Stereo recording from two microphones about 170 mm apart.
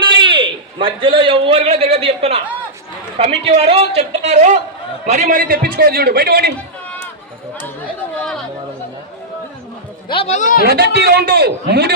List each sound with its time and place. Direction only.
0.0 s a man's voice: 30° right (ahead or behind)
5.4 s a man's voice: 60° right (ahead or behind)
10.1 s speech: 35° left (ahead or behind)
10.6 s a man's voice: 70° right (ahead or behind)